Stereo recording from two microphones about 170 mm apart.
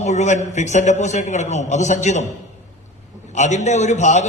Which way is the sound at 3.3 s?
45° left (ahead or behind).